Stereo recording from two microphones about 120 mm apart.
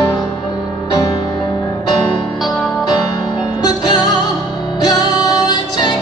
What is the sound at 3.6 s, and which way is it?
Music, 35° left (ahead or behind).